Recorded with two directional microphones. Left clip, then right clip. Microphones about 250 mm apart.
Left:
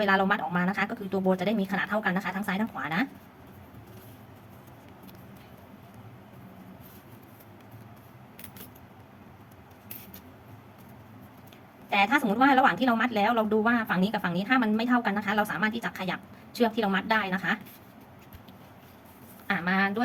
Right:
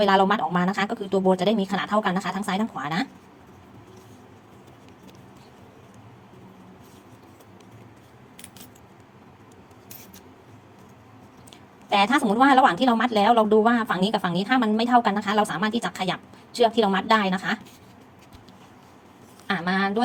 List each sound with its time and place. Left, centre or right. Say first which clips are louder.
0.0 s speech: right 5 dB; centre
12.1 s speech: right 5 dB; centre
19.5 s speech: right 2 dB; centre